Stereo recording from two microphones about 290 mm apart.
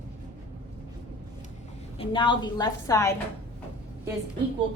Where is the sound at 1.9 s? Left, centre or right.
Centre.